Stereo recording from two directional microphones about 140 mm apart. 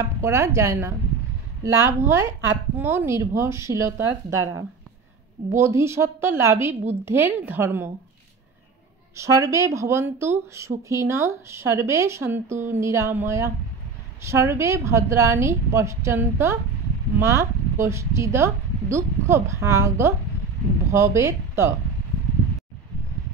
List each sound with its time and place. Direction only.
0.0 s a woman's voice: 20° right (ahead or behind)
9.1 s speech: 20° right (ahead or behind)